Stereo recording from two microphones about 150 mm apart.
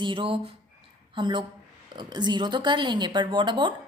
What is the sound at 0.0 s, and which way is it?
A woman's voice, 35° right (ahead or behind).